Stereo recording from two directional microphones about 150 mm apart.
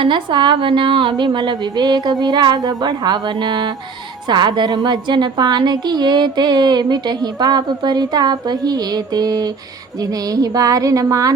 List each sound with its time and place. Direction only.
0.0 s a woman's voice: 30° right (ahead or behind)